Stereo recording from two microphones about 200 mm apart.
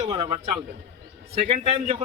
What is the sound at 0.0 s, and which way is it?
A man's voice, 25° right (ahead or behind).